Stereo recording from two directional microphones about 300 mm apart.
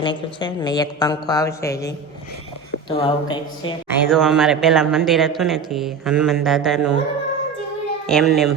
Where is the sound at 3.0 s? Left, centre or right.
Centre.